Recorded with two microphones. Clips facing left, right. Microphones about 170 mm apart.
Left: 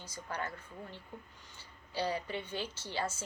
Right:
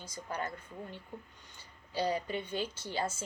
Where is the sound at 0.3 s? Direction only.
15° right (ahead or behind).